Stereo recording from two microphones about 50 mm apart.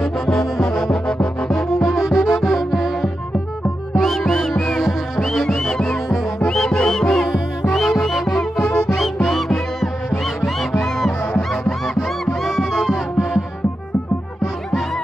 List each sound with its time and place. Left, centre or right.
0.0 s brass instrument: centre
1.0 s music: left
1.5 s music: centre